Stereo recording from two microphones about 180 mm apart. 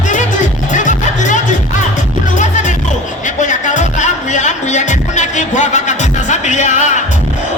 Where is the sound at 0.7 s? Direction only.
45° left (ahead or behind).